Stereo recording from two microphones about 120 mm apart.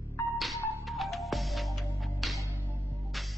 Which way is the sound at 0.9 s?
Centre (ahead or behind).